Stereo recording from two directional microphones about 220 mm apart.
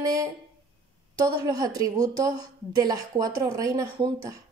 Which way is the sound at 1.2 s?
15° right (ahead or behind).